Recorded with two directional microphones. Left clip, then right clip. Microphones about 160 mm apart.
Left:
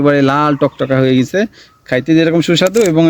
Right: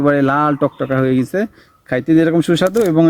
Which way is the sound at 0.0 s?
40° left (ahead or behind).